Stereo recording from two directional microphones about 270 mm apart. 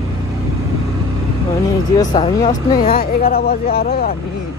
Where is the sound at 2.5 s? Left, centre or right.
Left.